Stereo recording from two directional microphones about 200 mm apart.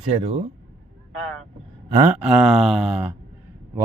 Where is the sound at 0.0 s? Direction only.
30° right (ahead or behind).